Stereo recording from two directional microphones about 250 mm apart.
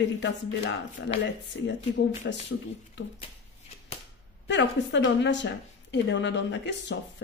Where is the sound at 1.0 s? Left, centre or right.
Left.